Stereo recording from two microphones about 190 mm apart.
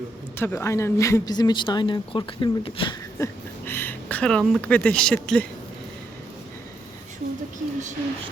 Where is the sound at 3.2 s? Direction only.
10° left (ahead or behind).